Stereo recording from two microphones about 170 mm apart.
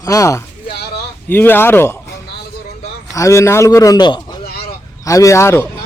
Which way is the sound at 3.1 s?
20° left (ahead or behind).